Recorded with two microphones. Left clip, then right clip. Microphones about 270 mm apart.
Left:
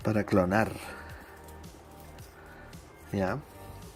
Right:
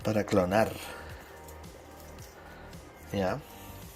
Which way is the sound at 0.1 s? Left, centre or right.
Centre.